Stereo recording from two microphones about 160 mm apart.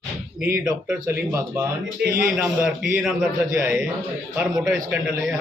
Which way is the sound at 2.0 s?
90° right.